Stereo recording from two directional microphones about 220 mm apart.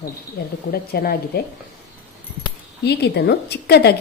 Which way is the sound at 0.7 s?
45° left (ahead or behind).